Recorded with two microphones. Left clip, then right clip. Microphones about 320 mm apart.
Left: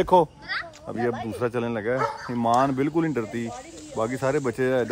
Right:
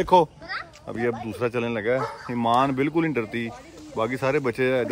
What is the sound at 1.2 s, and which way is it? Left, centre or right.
Speech, centre.